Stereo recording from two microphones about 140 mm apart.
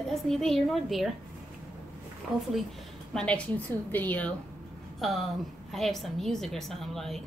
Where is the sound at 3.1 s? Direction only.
5° left (ahead or behind).